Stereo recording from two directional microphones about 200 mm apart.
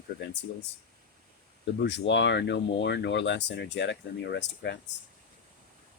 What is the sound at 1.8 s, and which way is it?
Speech, 65° left (ahead or behind).